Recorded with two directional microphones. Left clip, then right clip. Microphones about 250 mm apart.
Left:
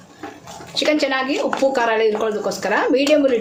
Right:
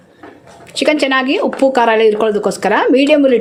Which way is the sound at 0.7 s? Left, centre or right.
Right.